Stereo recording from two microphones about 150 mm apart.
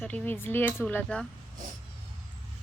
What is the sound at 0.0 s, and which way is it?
Speech, 10° left (ahead or behind).